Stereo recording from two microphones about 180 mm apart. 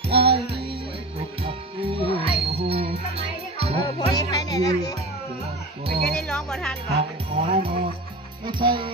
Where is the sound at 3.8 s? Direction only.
20° left (ahead or behind).